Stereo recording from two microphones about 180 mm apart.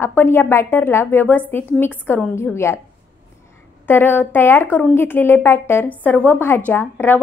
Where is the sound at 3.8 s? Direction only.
10° left (ahead or behind).